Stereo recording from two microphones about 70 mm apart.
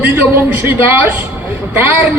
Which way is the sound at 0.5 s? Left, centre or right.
Right.